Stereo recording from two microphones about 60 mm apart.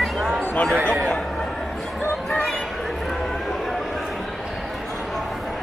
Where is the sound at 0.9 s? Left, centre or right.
Centre.